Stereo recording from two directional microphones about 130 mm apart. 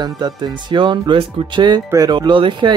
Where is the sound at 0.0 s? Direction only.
35° right (ahead or behind).